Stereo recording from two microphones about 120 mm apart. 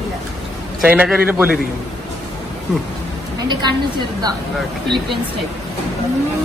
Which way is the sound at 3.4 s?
40° right (ahead or behind).